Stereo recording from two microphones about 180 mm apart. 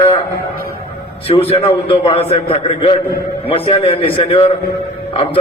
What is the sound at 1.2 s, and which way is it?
A man's voice, 30° left (ahead or behind).